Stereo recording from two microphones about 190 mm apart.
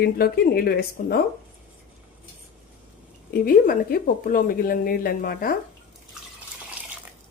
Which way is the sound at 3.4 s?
50° left (ahead or behind).